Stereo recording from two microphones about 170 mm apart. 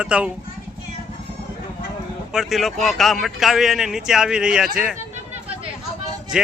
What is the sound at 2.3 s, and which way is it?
Speech, centre (ahead or behind).